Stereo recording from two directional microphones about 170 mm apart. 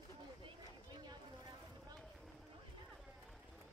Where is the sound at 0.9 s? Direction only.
25° right (ahead or behind).